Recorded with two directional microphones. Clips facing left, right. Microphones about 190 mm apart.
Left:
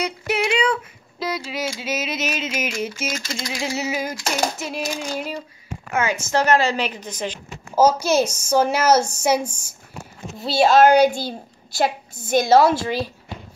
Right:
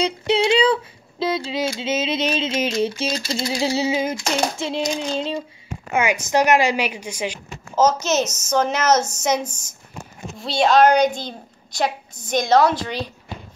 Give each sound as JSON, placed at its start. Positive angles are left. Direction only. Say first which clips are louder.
{"t": 0.0, "sound": "a sound", "louder": "right 4 dB", "side_deg": -30}
{"t": 5.9, "sound": "a woman's voice", "louder": "right 2 dB", "side_deg": -15}
{"t": 7.7, "sound": "a woman's voice", "louder": "left 2 dB", "side_deg": 10}